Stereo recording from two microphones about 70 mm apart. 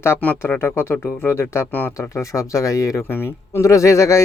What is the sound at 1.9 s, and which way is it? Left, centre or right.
Speech, left.